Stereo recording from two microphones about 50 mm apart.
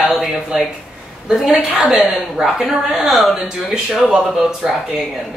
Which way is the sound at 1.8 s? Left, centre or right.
Centre.